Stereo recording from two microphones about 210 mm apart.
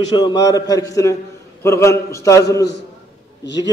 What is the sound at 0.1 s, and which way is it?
A man's voice, 20° left (ahead or behind).